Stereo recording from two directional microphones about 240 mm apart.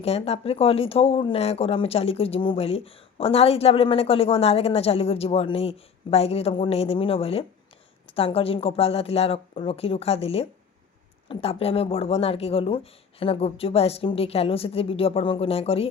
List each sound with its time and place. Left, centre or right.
0.0 s speech: left